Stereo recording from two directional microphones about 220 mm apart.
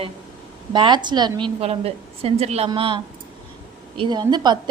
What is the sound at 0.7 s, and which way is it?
A woman's voice, 20° right (ahead or behind).